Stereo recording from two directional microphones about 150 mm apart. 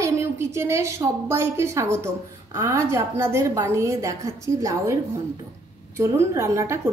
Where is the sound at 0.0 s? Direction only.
20° right (ahead or behind).